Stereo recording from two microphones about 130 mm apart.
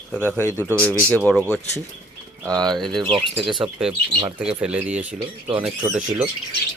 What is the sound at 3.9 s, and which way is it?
Speech, 30° right (ahead or behind).